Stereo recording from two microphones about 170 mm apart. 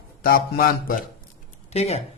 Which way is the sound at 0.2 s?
60° left (ahead or behind).